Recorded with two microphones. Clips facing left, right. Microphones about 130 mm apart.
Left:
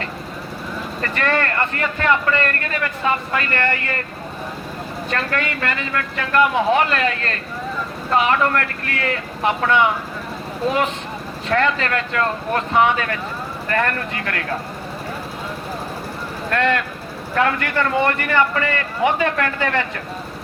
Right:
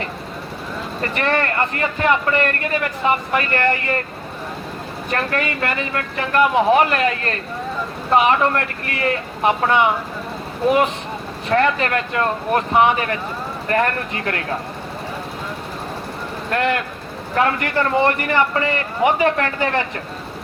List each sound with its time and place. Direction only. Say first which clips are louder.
1.0 s a man's voice: right 1 dB; 20° right (ahead or behind)
5.1 s a man's voice: right 2 dB; 20° right (ahead or behind)
11.5 s a man's voice: right 2 dB; 25° right (ahead or behind)
16.5 s a man's voice: left 1 dB; 20° right (ahead or behind)